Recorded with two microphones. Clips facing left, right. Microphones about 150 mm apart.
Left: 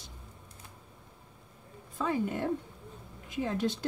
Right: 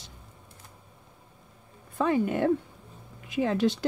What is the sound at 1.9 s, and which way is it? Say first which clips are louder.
Speech: right 6 dB; 80° right.